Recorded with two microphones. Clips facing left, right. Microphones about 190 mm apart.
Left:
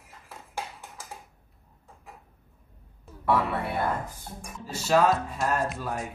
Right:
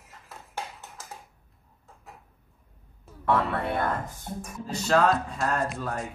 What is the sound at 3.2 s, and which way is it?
Speech, 10° left (ahead or behind).